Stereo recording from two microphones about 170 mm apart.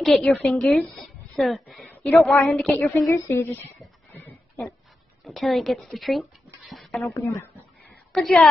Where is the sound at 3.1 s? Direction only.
15° left (ahead or behind).